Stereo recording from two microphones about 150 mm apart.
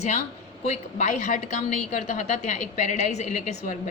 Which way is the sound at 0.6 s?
50° left (ahead or behind).